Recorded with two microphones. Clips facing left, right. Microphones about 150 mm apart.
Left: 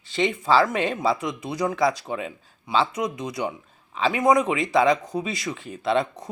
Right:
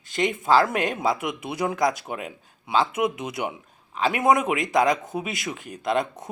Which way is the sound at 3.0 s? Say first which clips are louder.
Right 1 dB; 25° right (ahead or behind).